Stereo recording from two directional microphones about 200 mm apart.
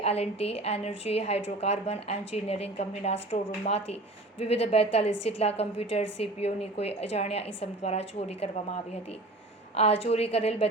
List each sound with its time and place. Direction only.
0.0 s a woman's voice: 30° left (ahead or behind)
9.7 s a woman's voice: 30° left (ahead or behind)